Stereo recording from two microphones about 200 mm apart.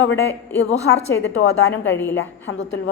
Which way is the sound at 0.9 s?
75° left (ahead or behind).